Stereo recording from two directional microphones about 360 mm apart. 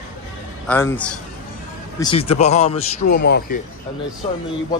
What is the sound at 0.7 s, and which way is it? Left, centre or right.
Speech, centre.